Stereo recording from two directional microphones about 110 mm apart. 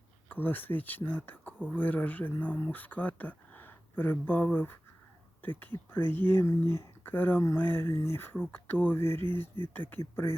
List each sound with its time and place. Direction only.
0.3 s speech: 15° left (ahead or behind)